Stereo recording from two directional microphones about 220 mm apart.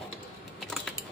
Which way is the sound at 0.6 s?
Centre (ahead or behind).